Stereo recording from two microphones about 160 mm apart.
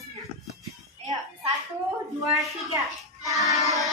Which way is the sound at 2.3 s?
20° right (ahead or behind).